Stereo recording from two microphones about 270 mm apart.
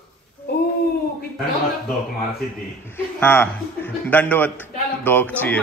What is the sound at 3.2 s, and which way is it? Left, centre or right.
A man's voice, centre.